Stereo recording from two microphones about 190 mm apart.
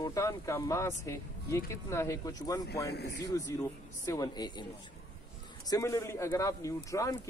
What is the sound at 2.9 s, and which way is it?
Speech, 60° left (ahead or behind).